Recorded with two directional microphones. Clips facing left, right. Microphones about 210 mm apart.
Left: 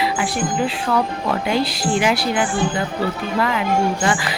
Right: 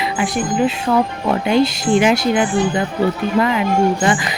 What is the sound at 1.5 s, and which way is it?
Speech, 20° right (ahead or behind).